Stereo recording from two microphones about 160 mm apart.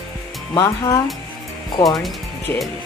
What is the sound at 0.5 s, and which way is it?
Speech, 20° left (ahead or behind).